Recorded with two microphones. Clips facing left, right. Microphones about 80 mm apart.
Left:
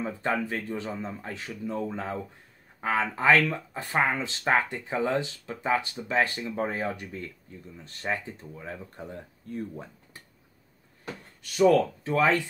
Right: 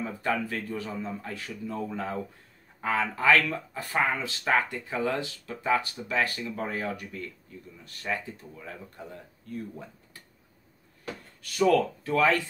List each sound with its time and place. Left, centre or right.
0.0 s speech: left
11.4 s speech: left